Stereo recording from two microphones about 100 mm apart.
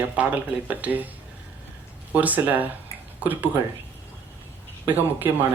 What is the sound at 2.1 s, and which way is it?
Speech, 15° right (ahead or behind).